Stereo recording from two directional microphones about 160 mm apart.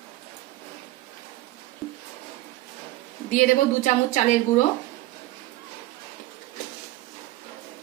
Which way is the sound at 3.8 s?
50° left (ahead or behind).